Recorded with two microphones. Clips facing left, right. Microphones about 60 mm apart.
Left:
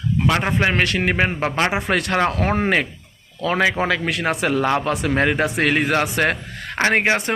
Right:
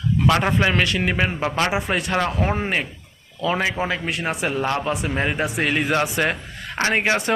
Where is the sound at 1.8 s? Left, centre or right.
Left.